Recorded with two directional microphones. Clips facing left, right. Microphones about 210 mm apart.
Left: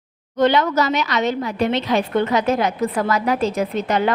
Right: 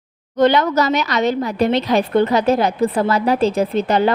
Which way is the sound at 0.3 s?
40° right (ahead or behind).